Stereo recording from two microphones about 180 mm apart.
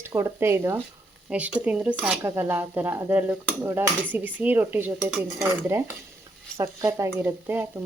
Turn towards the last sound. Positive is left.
turn(degrees=-10)  # may be behind; listen again after turning